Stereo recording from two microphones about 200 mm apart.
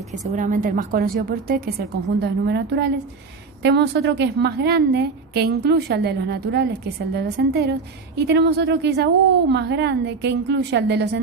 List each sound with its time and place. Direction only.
0.3 s a woman's voice: 40° right (ahead or behind); by 11.2 s 60° right (ahead or behind)